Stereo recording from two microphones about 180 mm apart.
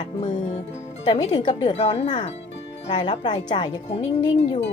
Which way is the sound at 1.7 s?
35° left (ahead or behind).